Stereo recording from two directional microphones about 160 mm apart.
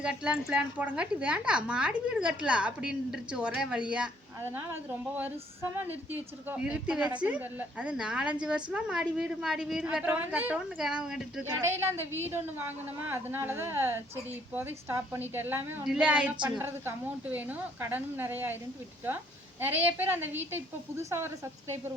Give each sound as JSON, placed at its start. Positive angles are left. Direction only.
{"t": 0.0, "sound": "a woman's voice", "side_deg": -5}
{"t": 5.9, "sound": "a woman's voice", "side_deg": -10}
{"t": 11.6, "sound": "a woman's voice", "side_deg": -15}